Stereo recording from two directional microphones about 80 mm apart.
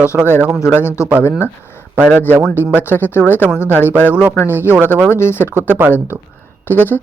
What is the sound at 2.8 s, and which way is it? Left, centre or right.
Speech, left.